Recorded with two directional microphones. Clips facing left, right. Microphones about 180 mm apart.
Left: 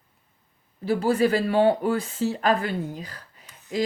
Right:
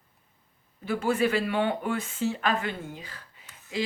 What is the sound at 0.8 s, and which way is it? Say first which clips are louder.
Speech: left 4 dB; 35° left (ahead or behind).